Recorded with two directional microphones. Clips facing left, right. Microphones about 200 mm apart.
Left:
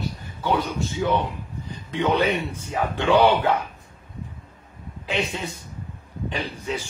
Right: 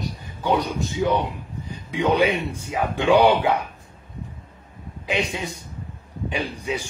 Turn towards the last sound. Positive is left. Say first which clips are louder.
# right 2 dB
turn(degrees=-15)  # may be behind; listen again after turning